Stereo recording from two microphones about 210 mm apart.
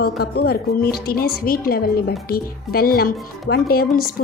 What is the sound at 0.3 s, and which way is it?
A woman's voice, 45° left (ahead or behind).